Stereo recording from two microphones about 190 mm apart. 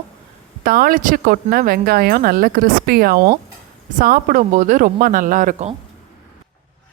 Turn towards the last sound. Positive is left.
turn(degrees=-40)  # may be behind; listen again after turning